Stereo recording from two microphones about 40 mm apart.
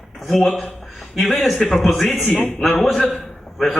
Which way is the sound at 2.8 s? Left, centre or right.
Centre.